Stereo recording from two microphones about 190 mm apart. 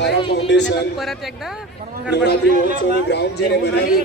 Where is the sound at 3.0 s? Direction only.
60° left (ahead or behind).